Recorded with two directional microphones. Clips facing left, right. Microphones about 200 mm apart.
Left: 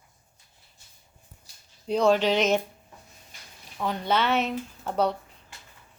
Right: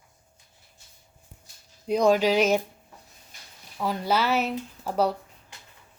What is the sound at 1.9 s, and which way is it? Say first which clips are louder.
Speech: right 1 dB; 10° right (ahead or behind).